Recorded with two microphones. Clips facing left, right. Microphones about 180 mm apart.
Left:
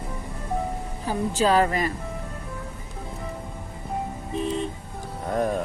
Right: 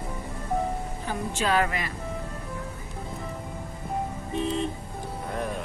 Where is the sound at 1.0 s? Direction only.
35° left (ahead or behind).